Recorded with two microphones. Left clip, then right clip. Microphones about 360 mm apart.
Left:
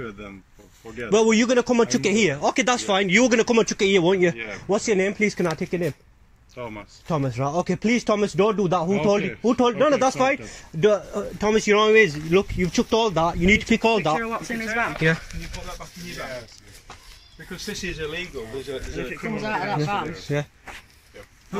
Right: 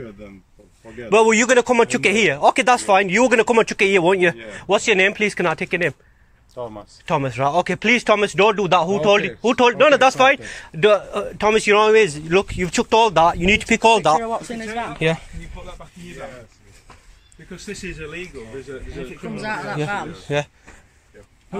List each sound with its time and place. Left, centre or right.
1.1 s speech: right
7.1 s speech: right
14.2 s speech: centre
19.3 s speech: centre
20.3 s speech: right